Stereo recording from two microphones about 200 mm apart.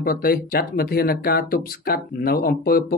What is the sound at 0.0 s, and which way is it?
Speech, 45° left (ahead or behind).